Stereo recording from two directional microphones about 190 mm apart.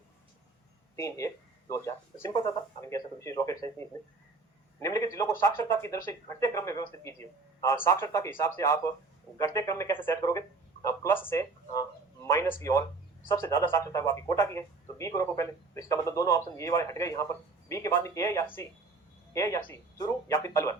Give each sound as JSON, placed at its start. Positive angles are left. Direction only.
{"t": 0.9, "sound": "speech", "side_deg": 15}